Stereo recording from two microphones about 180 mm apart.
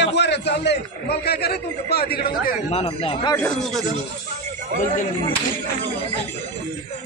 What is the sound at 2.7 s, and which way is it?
Speech, 35° left (ahead or behind).